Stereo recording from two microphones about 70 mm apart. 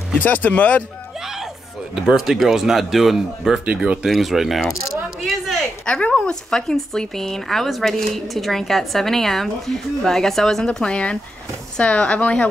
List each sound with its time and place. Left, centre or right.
0.2 s speech: left
1.2 s a sound: centre
2.0 s speech: centre
3.6 s speech: centre
4.0 s speech: centre
5.9 s speech: centre